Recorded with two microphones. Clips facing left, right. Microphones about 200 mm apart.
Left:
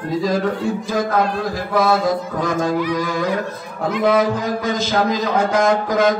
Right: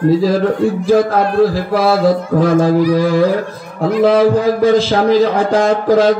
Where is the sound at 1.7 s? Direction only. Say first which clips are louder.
Right 2 dB; 30° right (ahead or behind).